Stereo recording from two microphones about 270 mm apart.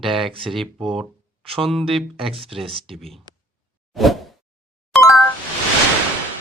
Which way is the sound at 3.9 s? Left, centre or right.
Centre.